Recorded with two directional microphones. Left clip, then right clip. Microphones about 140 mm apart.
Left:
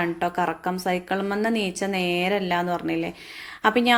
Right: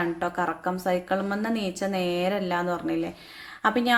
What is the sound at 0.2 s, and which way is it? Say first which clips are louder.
A woman's voice: left 3 dB; 15° left (ahead or behind).